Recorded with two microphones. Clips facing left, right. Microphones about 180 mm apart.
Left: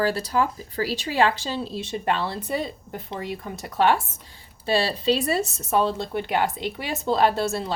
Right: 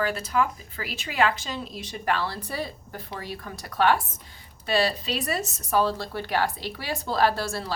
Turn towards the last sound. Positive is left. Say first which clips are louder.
# left 3 dB
turn(degrees=25)  # may be behind; listen again after turning